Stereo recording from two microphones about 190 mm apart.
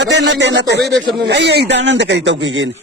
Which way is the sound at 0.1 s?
65° right (ahead or behind).